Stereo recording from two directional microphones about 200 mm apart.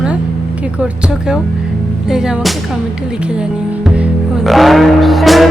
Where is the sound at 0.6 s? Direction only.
5° right (ahead or behind).